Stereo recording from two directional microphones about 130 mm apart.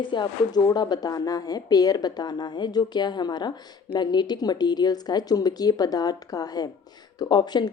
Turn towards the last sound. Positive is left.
turn(degrees=35)  # may be behind; listen again after turning